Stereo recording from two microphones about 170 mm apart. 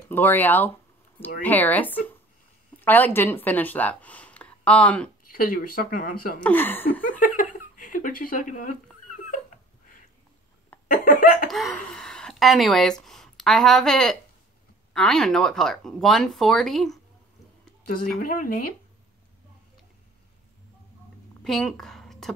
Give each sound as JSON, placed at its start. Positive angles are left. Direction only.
{"t": 0.1, "sound": "speech", "side_deg": 10}
{"t": 5.3, "sound": "speech", "side_deg": 55}
{"t": 6.4, "sound": "speech", "side_deg": 10}
{"t": 7.7, "sound": "a sound", "side_deg": 50}
{"t": 10.9, "sound": "speech", "side_deg": 55}
{"t": 11.4, "sound": "a sound", "side_deg": 0}
{"t": 13.0, "sound": "speech", "side_deg": 0}
{"t": 18.2, "sound": "speech", "side_deg": 55}
{"t": 21.5, "sound": "a sound", "side_deg": 0}